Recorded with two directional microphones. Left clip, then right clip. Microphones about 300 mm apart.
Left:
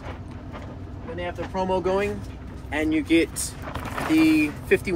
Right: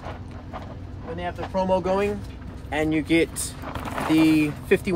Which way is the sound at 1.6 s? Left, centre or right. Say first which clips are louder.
Right 1 dB; right.